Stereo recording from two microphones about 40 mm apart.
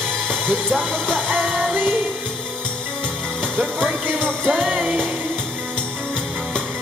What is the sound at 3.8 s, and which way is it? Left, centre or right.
Music, right.